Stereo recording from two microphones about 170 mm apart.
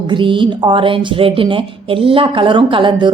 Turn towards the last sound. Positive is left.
turn(degrees=-30)  # may be behind; listen again after turning